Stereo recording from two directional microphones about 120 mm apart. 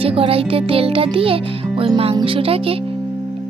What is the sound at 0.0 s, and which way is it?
Speech, 50° right (ahead or behind).